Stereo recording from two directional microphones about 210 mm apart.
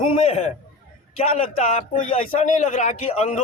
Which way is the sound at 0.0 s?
30° left (ahead or behind).